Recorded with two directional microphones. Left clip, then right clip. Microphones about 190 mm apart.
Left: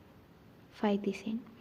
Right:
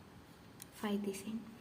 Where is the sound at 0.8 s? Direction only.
30° left (ahead or behind).